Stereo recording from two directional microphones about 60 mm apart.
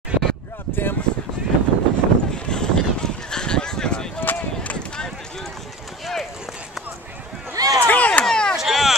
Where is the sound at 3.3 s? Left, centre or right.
Centre.